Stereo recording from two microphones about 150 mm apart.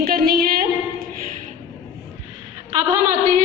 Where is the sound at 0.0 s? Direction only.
85° right.